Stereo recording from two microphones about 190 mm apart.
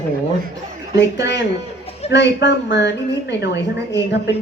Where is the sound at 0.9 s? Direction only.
65° left (ahead or behind).